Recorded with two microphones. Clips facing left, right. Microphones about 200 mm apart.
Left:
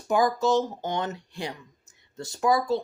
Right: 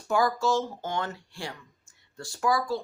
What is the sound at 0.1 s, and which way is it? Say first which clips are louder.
Speech: left 3 dB; 20° left (ahead or behind).